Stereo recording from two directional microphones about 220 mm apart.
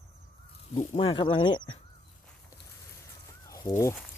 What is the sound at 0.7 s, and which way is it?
Speech, 30° left (ahead or behind).